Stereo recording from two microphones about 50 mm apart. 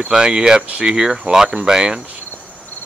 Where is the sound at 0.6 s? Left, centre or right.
Right.